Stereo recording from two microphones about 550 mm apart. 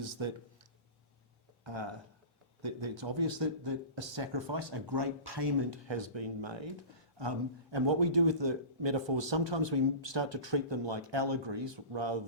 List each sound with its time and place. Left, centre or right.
2.6 s speech: right